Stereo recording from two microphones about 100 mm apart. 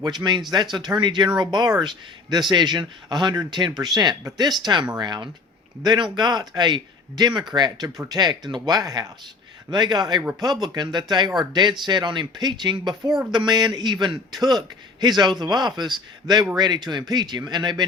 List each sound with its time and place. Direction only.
0.0 s a man's voice: 45° right (ahead or behind)